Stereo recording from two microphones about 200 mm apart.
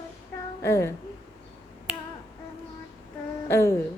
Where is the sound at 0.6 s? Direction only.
15° left (ahead or behind).